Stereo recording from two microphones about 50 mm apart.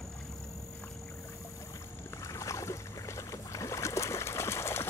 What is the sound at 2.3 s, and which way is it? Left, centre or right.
Boat, left.